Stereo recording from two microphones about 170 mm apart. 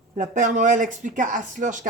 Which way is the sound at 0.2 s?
50° right (ahead or behind).